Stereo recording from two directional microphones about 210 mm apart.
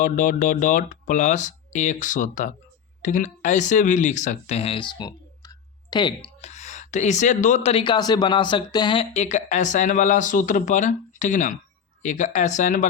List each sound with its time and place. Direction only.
0.0 s speech: 40° left (ahead or behind)